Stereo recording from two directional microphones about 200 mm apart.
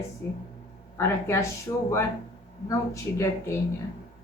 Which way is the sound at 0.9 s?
15° left (ahead or behind).